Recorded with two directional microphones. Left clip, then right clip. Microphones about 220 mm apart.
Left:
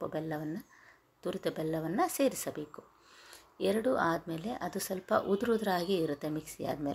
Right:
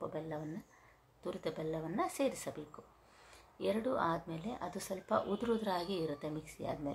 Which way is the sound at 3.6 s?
25° left (ahead or behind).